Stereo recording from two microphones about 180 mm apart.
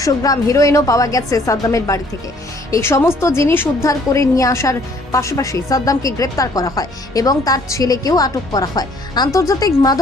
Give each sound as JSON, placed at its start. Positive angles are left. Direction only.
{"t": 0.0, "sound": "a woman's voice", "side_deg": 20}